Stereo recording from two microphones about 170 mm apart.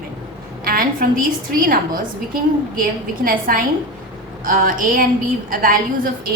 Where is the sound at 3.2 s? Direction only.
55° right (ahead or behind).